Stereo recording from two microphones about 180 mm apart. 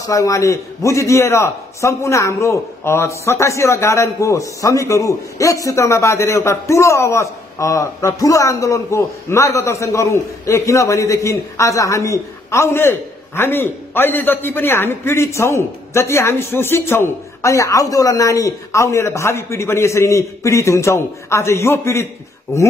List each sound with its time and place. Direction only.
0.0 s a man's voice: 20° left (ahead or behind)